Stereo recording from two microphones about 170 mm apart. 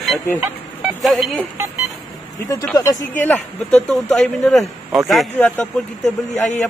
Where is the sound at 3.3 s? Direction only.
5° left (ahead or behind).